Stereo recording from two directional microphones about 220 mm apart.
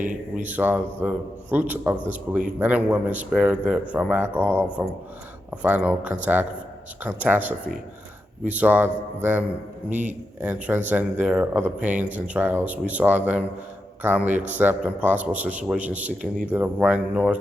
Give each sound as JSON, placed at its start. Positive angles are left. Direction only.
{"t": 0.0, "sound": "a man's voice", "side_deg": -35}
{"t": 0.4, "sound": "speech", "side_deg": -5}
{"t": 9.9, "sound": "speech", "side_deg": -35}
{"t": 10.4, "sound": "speech", "side_deg": -10}